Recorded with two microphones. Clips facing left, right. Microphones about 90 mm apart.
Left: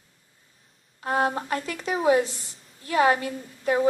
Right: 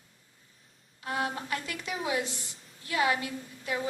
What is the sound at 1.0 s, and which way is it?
A woman's voice, 40° left (ahead or behind).